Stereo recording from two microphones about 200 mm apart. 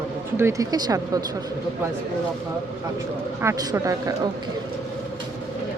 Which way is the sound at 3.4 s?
15° right (ahead or behind).